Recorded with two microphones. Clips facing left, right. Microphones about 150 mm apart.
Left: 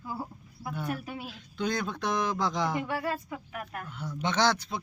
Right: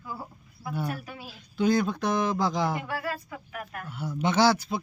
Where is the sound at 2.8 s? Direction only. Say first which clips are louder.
Left 1 dB; 20° left (ahead or behind).